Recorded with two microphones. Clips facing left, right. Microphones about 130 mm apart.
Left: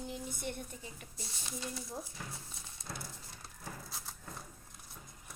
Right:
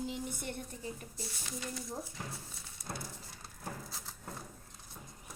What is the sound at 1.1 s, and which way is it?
Speech, 15° left (ahead or behind).